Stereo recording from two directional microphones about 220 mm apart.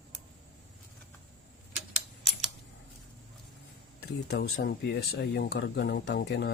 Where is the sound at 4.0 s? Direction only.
45° left (ahead or behind).